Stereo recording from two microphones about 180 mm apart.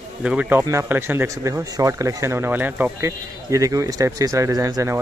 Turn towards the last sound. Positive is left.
turn(degrees=-20)  # may be behind; listen again after turning